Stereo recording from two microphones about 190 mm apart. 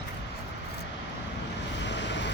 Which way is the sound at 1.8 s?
65° left (ahead or behind).